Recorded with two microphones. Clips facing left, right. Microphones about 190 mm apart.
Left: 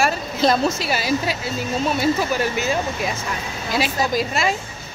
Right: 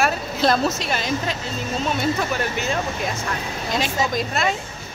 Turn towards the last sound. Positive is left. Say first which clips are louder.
# left 1 dB
turn(degrees=5)  # may be behind; listen again after turning